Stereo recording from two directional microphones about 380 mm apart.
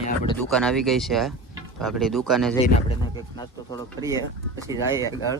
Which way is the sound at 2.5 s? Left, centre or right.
Centre.